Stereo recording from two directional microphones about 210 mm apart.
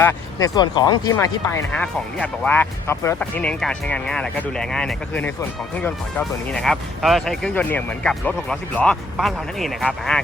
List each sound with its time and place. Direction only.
0.0 s speech: 15° left (ahead or behind)